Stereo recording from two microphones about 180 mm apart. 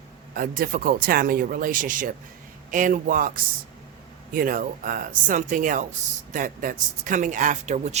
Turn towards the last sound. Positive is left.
turn(degrees=-40)  # may be behind; listen again after turning